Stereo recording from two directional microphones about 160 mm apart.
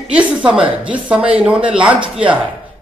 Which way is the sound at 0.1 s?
10° right (ahead or behind).